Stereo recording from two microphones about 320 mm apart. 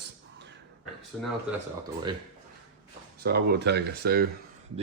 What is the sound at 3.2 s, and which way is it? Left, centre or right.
Speech, right.